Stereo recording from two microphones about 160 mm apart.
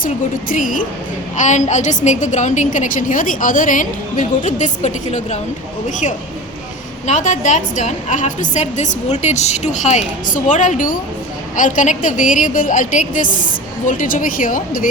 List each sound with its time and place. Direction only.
0.0 s a woman's voice: 60° left (ahead or behind)
7.1 s a woman's voice: 50° left (ahead or behind)